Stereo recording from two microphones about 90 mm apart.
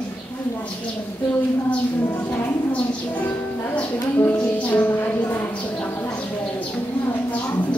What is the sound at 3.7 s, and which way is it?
Music, 20° left (ahead or behind).